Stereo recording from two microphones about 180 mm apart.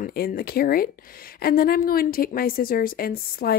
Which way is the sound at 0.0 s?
55° left (ahead or behind).